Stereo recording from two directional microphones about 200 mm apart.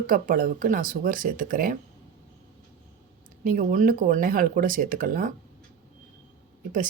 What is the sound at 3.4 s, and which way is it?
A woman's voice, 40° right (ahead or behind).